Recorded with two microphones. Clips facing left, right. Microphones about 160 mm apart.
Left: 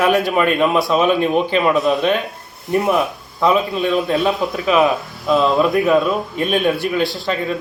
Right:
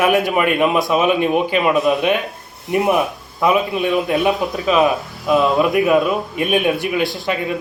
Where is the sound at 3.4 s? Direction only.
15° right (ahead or behind).